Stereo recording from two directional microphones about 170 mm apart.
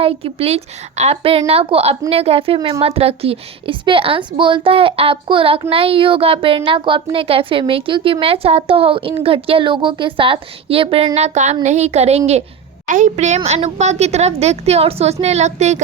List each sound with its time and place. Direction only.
0.0 s a woman's voice: 35° right (ahead or behind)